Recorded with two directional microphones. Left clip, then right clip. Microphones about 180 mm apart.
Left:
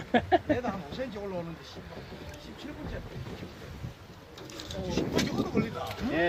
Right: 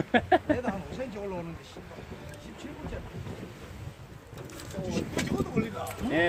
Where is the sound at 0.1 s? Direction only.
15° right (ahead or behind).